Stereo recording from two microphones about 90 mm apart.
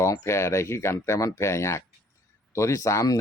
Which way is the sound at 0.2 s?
30° left (ahead or behind).